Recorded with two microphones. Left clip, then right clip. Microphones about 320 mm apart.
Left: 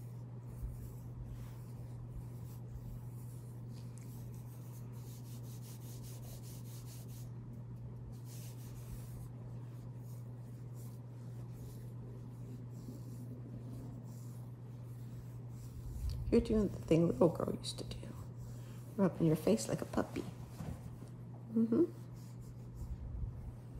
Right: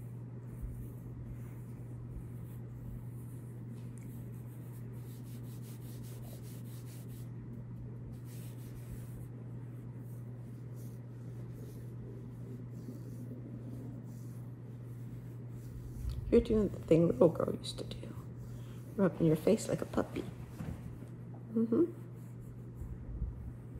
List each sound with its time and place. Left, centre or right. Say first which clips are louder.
16.3 s speech: right 4 dB; left
18.9 s speech: right 3 dB; left
21.5 s speech: right 2 dB; left